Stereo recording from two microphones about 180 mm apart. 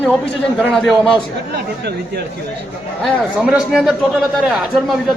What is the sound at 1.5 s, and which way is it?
Speech, 65° right (ahead or behind).